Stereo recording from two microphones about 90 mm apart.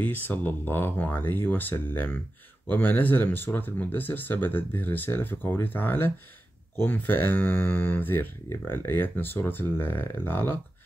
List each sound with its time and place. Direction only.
0.0 s speech: 20° left (ahead or behind)